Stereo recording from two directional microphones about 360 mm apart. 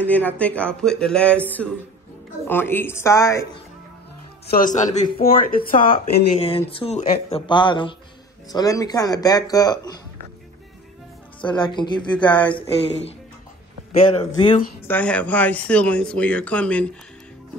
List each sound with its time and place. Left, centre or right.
0.0 s speech: centre
4.5 s speech: left
11.4 s speech: centre
14.1 s speech: centre